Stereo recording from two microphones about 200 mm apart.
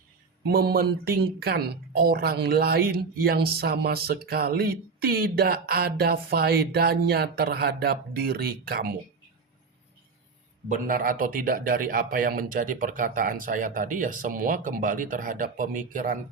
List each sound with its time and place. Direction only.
0.4 s speech: 50° right (ahead or behind)
10.7 s speech: 45° right (ahead or behind)